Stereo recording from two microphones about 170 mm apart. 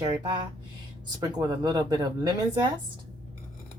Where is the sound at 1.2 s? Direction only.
20° right (ahead or behind).